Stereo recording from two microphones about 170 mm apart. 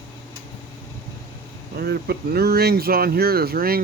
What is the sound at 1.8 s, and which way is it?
Speech, 65° right (ahead or behind).